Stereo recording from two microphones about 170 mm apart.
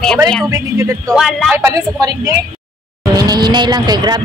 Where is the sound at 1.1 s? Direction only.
Centre (ahead or behind).